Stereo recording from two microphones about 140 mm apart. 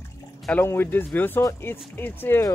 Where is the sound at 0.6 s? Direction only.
15° left (ahead or behind).